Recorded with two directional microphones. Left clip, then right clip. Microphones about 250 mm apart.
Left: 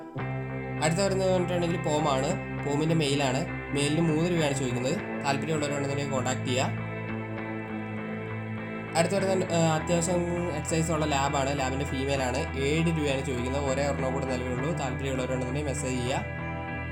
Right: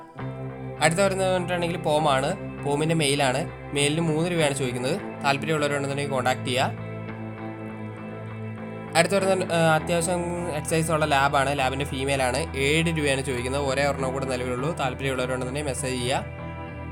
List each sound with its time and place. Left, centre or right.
0.8 s speech: right
8.9 s speech: right